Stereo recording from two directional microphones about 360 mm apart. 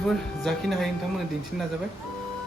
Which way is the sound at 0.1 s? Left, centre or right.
Centre.